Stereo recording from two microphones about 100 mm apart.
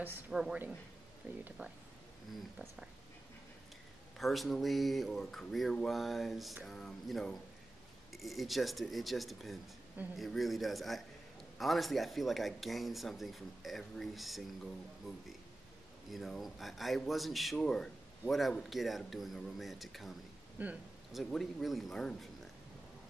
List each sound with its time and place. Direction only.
0.3 s a man's voice: 5° right (ahead or behind)
1.2 s speech: 15° right (ahead or behind)
4.2 s a man's voice: centre (ahead or behind)
16.1 s a man's voice: centre (ahead or behind)
20.6 s speech: 15° right (ahead or behind)
21.1 s a man's voice: 5° left (ahead or behind)